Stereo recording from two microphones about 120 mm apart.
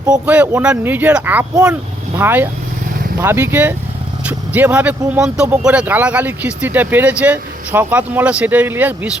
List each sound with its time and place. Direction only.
0.1 s speech: 10° right (ahead or behind)